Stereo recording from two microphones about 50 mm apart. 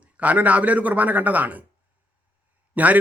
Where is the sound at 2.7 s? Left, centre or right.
Right.